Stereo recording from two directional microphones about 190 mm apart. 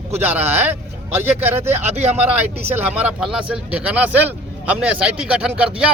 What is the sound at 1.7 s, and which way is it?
Speech, 35° right (ahead or behind).